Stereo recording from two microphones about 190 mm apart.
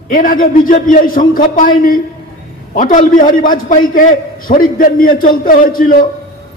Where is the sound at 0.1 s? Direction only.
45° left (ahead or behind).